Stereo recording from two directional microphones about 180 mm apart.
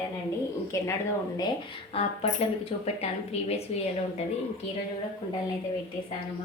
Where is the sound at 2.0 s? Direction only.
35° left (ahead or behind).